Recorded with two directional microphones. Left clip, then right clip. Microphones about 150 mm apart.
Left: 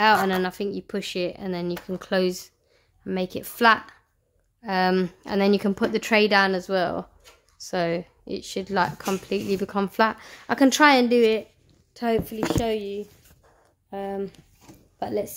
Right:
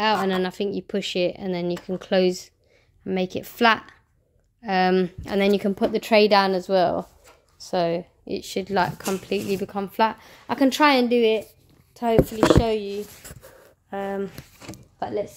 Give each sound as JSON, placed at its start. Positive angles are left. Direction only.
{"t": 0.0, "sound": "speech", "side_deg": 15}
{"t": 8.3, "sound": "speech", "side_deg": -5}
{"t": 9.7, "sound": "a woman's voice", "side_deg": 20}
{"t": 15.0, "sound": "speech", "side_deg": 40}